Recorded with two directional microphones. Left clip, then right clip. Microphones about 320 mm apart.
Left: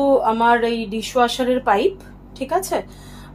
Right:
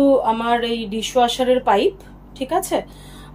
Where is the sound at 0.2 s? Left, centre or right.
Centre.